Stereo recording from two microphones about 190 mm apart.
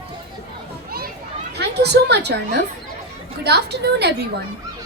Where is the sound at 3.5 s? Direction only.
60° right (ahead or behind).